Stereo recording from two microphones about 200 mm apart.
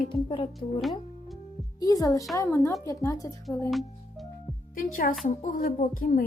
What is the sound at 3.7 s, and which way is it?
Music, centre (ahead or behind).